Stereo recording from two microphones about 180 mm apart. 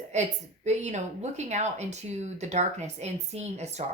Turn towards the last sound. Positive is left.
turn(degrees=-35)  # may be behind; listen again after turning